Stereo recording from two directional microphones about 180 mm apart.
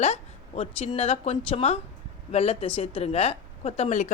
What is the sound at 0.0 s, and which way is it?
A woman's voice, 35° left (ahead or behind).